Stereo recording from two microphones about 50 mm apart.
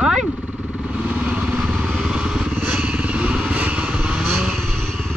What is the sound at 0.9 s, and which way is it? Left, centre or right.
Motorcycle, right.